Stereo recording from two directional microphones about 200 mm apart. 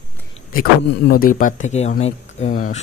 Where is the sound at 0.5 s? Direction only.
45° left (ahead or behind).